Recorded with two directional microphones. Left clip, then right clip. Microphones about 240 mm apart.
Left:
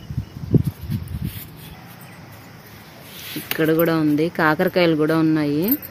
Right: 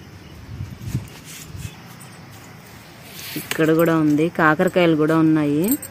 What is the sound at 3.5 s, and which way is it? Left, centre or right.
Speech, centre.